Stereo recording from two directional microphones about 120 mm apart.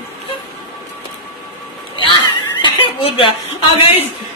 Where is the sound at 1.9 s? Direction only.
40° left (ahead or behind).